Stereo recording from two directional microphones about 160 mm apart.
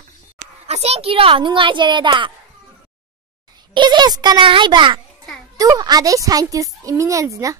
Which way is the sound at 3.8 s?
25° right (ahead or behind).